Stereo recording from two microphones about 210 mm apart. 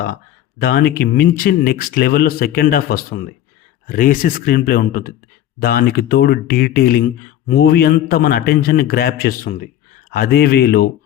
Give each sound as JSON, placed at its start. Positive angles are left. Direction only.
{"t": 0.6, "sound": "speech", "side_deg": 50}